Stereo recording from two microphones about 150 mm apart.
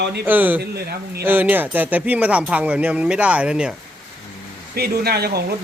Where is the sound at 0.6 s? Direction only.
90° right.